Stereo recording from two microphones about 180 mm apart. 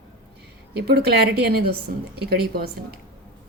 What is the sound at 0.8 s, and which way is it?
A woman's voice, 60° right (ahead or behind).